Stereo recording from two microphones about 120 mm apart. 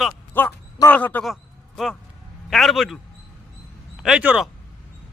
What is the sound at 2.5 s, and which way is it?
Speech, centre (ahead or behind).